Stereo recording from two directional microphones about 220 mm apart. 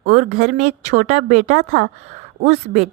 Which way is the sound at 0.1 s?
35° right (ahead or behind).